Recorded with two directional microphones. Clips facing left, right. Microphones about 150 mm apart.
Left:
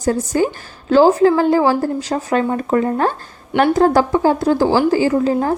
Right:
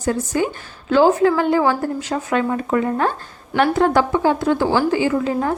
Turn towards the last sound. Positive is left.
turn(degrees=35)  # may be behind; listen again after turning